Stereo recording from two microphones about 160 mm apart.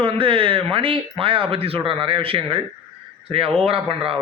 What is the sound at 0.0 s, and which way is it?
Speech, 35° right (ahead or behind).